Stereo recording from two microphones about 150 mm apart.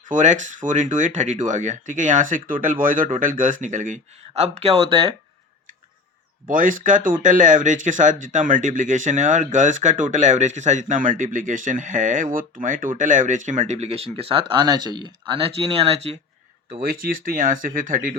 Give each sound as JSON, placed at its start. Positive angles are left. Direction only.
{"t": 0.1, "sound": "speech", "side_deg": -55}
{"t": 6.5, "sound": "speech", "side_deg": -65}
{"t": 16.8, "sound": "speech", "side_deg": -80}